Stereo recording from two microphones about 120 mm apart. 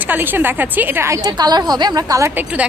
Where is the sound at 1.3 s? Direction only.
35° right (ahead or behind).